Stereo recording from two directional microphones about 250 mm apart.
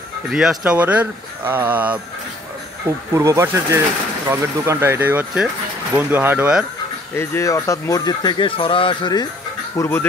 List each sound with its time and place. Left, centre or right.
0.3 s speech: centre
3.1 s speech: centre
7.2 s speech: centre